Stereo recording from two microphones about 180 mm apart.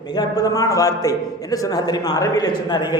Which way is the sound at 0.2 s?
20° left (ahead or behind).